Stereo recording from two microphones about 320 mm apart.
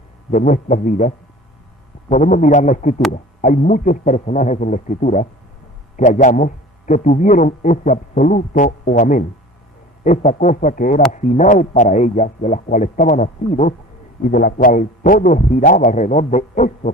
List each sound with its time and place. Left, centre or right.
0.3 s speech: left